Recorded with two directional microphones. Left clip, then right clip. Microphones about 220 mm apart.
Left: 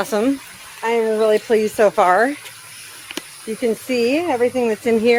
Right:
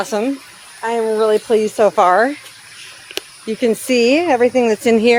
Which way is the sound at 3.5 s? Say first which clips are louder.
Right 4 dB; 55° right (ahead or behind).